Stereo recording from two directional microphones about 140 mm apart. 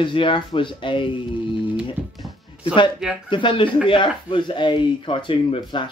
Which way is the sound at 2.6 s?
35° left (ahead or behind).